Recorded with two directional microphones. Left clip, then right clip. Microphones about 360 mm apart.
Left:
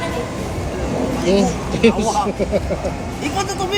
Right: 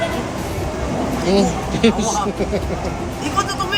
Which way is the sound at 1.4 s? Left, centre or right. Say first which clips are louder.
Even; centre.